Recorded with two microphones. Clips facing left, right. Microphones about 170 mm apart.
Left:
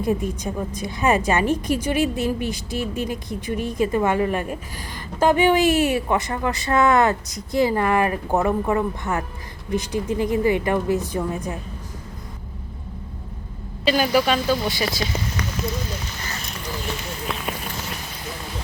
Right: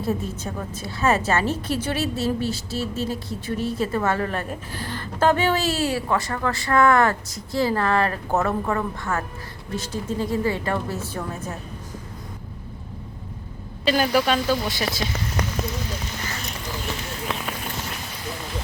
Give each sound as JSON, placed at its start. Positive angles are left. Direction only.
{"t": 0.0, "sound": "a woman's voice", "side_deg": 15}
{"t": 13.8, "sound": "speech", "side_deg": 5}